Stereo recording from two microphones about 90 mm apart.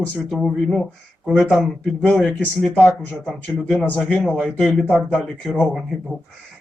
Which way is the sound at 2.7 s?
15° left (ahead or behind).